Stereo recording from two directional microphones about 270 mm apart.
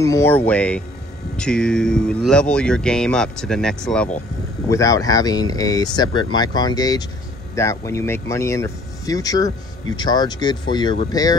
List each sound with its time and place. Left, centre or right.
0.0 s speech: centre